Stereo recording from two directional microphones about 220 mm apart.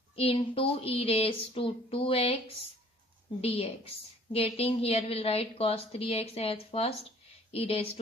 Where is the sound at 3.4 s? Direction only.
25° left (ahead or behind).